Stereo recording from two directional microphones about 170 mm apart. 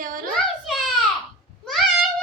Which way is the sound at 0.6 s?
Centre (ahead or behind).